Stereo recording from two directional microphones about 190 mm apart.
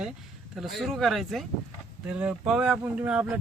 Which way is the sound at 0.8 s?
Centre (ahead or behind).